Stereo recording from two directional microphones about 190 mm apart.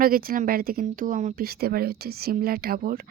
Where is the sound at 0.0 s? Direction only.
50° right (ahead or behind).